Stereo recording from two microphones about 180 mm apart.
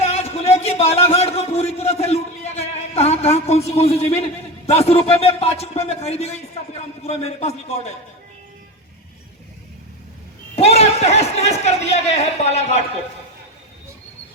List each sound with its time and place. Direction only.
0.0 s a sound: 35° left (ahead or behind)
5.4 s a man's voice: 35° left (ahead or behind)
10.5 s a man's voice: 35° left (ahead or behind)